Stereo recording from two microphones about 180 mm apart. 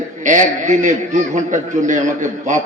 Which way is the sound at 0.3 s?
45° right (ahead or behind).